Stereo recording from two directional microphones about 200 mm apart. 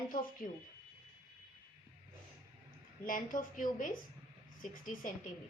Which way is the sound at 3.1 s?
40° left (ahead or behind).